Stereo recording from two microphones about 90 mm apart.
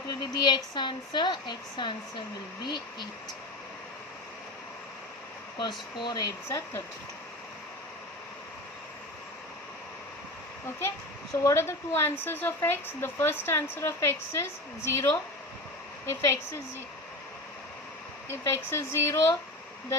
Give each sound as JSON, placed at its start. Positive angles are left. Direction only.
{"t": 0.1, "sound": "speech", "side_deg": 55}
{"t": 5.5, "sound": "speech", "side_deg": 60}
{"t": 6.1, "sound": "speech", "side_deg": 35}
{"t": 11.4, "sound": "a woman's voice", "side_deg": 30}
{"t": 18.3, "sound": "speech", "side_deg": 30}